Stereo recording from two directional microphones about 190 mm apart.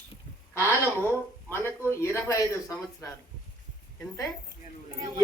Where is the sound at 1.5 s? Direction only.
10° left (ahead or behind).